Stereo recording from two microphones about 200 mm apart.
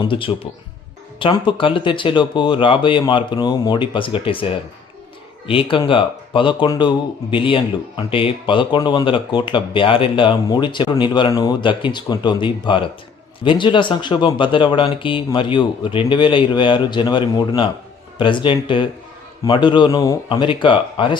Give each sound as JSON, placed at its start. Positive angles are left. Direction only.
{"t": 0.0, "sound": "speech", "side_deg": 25}